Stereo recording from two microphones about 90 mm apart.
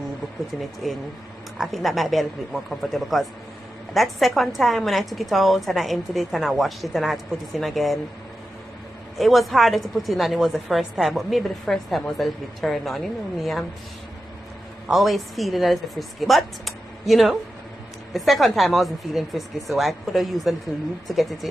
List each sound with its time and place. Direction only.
0.8 s a woman's voice: centre (ahead or behind)
9.2 s a woman's voice: centre (ahead or behind)
14.9 s a woman's voice: centre (ahead or behind)